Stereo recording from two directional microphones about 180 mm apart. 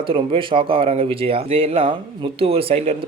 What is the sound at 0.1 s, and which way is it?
Speech, 30° right (ahead or behind).